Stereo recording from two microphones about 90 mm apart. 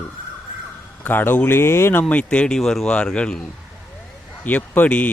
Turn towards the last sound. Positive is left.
turn(degrees=15)  # may be behind; listen again after turning